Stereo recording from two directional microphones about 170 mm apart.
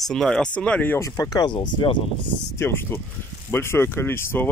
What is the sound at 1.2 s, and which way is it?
Speech, 25° left (ahead or behind).